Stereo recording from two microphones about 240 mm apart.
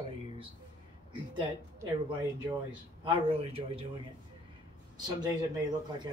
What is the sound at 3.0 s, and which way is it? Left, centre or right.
Speech, right.